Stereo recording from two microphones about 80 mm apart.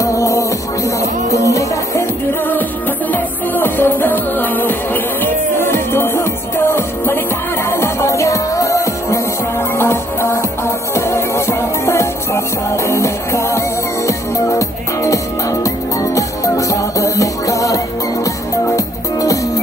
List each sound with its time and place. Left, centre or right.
0.0 s music: left
3.1 s music: left
7.7 s music: left